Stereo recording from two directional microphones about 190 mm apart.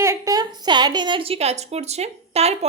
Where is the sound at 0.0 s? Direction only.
15° right (ahead or behind).